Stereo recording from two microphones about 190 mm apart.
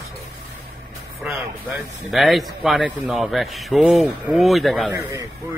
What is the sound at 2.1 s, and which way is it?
Speech, centre (ahead or behind).